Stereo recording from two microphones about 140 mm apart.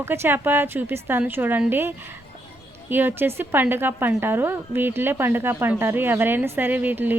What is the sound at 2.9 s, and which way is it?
A woman's voice, 15° right (ahead or behind).